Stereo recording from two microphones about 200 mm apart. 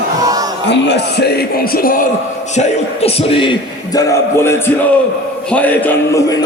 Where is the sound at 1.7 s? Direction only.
45° left (ahead or behind).